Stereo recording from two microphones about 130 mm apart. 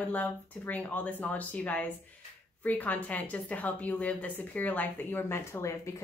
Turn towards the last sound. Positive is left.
turn(degrees=20)  # may be behind; listen again after turning